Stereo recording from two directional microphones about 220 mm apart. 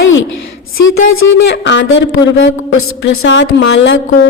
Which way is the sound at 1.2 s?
55° left (ahead or behind).